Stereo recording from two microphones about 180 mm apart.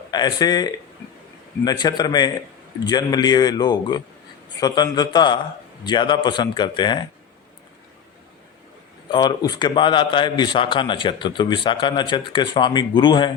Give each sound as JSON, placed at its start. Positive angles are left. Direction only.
{"t": 0.1, "sound": "a man's voice", "side_deg": 25}
{"t": 9.0, "sound": "a man's voice", "side_deg": 25}